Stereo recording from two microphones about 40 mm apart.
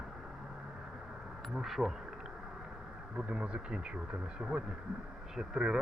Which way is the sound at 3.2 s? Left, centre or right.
Right.